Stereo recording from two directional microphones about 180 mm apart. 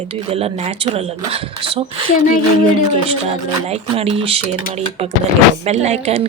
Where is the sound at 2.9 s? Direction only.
35° right (ahead or behind).